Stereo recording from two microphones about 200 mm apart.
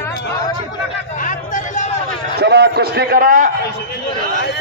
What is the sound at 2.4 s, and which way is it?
A man's voice, 55° right (ahead or behind).